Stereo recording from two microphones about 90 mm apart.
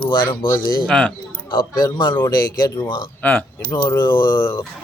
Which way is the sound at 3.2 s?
20° left (ahead or behind).